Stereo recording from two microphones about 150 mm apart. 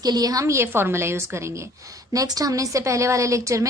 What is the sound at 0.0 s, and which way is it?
A woman's voice, 25° right (ahead or behind).